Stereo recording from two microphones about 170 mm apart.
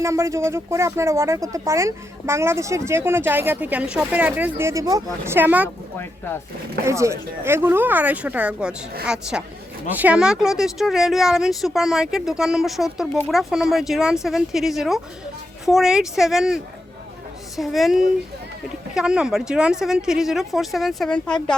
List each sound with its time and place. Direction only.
0.0 s speech: 15° right (ahead or behind)
6.0 s speech: 15° left (ahead or behind)
6.8 s speech: 15° right (ahead or behind)
17.6 s speech: centre (ahead or behind)